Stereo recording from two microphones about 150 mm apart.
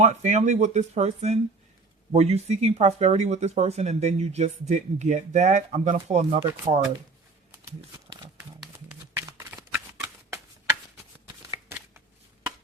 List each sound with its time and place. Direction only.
0.0 s speech: 50° right (ahead or behind)
8.6 s a sound: 10° right (ahead or behind)
9.2 s shuffling cards: 20° right (ahead or behind)